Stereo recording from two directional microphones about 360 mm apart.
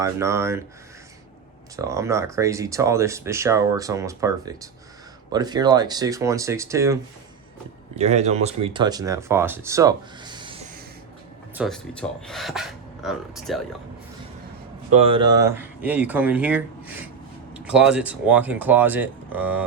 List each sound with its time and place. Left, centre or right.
0.0 s speech: centre
1.7 s speech: centre
11.5 s speech: centre
14.9 s speech: centre